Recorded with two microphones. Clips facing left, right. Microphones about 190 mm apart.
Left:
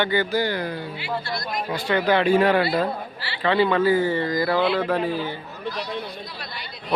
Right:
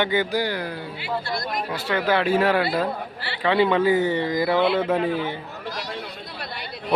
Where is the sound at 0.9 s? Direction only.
55° right (ahead or behind).